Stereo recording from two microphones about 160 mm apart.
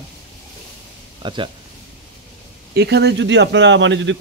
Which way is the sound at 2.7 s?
90° right.